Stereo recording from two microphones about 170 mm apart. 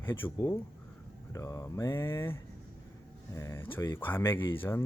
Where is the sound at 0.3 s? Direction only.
25° left (ahead or behind).